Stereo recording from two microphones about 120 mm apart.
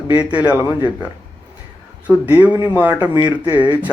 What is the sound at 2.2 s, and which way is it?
Speech, 15° right (ahead or behind).